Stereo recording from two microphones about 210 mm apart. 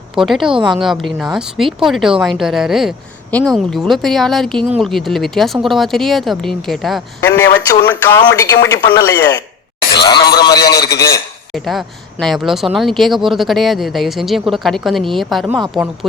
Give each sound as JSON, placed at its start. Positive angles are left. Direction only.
{"t": 0.2, "sound": "speech", "side_deg": 0}
{"t": 7.2, "sound": "a man's voice", "side_deg": 10}
{"t": 11.5, "sound": "speech", "side_deg": 0}